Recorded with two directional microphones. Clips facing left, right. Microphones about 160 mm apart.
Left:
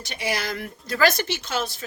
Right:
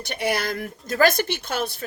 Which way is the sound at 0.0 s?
55° right (ahead or behind).